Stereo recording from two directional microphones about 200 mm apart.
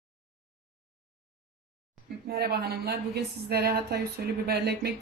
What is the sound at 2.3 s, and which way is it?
A woman's voice, 50° right (ahead or behind).